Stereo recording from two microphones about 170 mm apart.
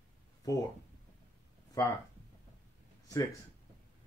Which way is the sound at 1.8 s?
20° left (ahead or behind).